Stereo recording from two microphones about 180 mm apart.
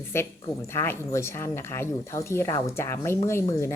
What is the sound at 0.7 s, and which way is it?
Speech, 15° left (ahead or behind).